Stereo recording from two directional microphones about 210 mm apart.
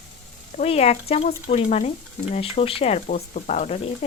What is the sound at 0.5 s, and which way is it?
Speech, 30° left (ahead or behind).